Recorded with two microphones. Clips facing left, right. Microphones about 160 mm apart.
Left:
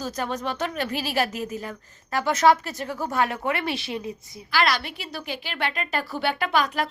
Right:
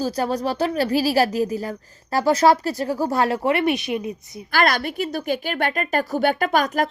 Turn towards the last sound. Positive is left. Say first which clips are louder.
# right 4 dB
turn(degrees=-45)  # may be behind; listen again after turning